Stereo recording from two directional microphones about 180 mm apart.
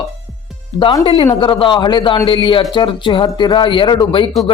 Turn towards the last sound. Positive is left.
turn(degrees=25)  # may be behind; listen again after turning